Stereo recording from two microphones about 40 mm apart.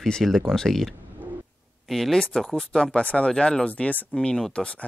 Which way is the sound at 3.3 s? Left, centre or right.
Left.